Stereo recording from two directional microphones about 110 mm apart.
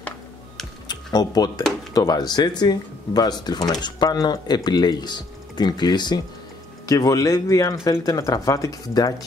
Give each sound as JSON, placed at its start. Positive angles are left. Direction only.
{"t": 0.8, "sound": "computer keyboard", "side_deg": 35}
{"t": 2.0, "sound": "speech", "side_deg": 35}